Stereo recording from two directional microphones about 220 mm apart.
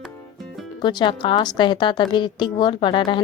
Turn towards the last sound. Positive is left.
turn(degrees=20)  # may be behind; listen again after turning